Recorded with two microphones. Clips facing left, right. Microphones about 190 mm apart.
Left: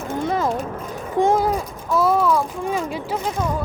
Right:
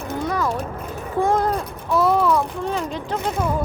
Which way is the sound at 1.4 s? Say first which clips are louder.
Left 1 dB; 10° left (ahead or behind).